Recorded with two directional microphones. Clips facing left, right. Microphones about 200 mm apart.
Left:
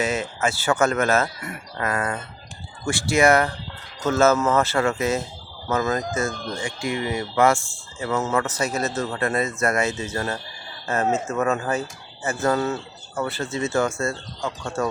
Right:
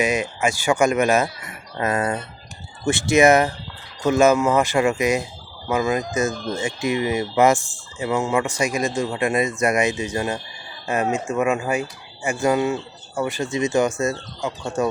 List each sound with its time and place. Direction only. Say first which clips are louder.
0.0 s speech: right 3 dB; 15° right (ahead or behind)